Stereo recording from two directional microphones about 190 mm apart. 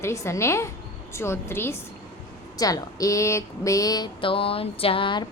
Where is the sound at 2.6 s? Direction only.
20° left (ahead or behind).